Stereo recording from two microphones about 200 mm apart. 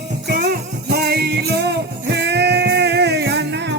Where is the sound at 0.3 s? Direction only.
50° right (ahead or behind).